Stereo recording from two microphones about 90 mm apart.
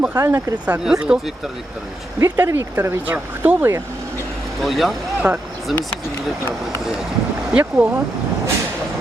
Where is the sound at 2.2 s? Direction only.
30° right (ahead or behind).